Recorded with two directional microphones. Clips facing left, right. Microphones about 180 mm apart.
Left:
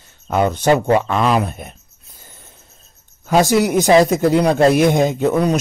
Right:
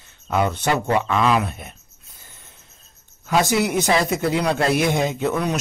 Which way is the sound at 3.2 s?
40° left (ahead or behind).